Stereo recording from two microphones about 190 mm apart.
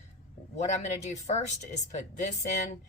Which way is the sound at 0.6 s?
35° left (ahead or behind).